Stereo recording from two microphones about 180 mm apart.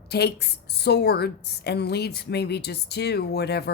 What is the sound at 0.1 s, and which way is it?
A woman's voice, 65° left (ahead or behind).